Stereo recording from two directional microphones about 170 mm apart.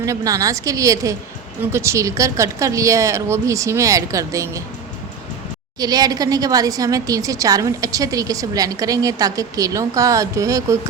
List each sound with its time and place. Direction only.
0.0 s a woman's voice: 20° right (ahead or behind)
5.8 s a woman's voice: 20° right (ahead or behind)